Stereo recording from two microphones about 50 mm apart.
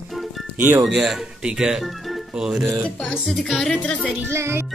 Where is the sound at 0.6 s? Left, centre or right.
Right.